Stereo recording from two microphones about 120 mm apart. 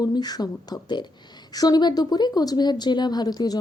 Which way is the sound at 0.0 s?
35° left (ahead or behind).